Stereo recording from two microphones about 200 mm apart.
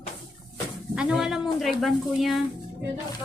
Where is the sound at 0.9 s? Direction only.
Centre (ahead or behind).